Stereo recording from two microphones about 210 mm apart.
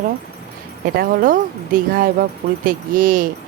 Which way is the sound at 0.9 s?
45° right (ahead or behind).